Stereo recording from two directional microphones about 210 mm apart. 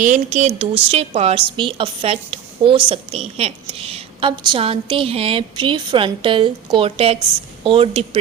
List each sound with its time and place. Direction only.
0.0 s a woman's voice: 35° right (ahead or behind)